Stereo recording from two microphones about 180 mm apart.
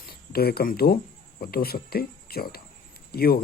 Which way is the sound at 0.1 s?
60° left (ahead or behind).